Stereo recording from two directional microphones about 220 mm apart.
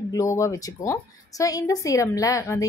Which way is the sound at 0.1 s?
15° left (ahead or behind).